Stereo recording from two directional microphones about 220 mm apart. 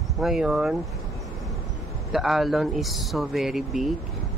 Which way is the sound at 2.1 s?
Centre (ahead or behind).